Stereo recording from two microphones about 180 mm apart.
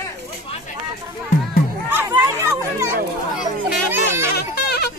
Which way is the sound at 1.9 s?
10° right (ahead or behind).